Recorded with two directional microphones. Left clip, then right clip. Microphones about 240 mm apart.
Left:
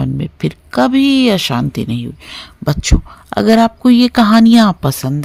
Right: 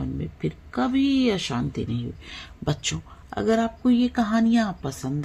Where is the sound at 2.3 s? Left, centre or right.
Left.